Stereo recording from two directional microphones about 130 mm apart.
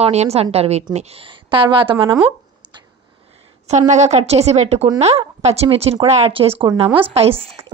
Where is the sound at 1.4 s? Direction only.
40° right (ahead or behind).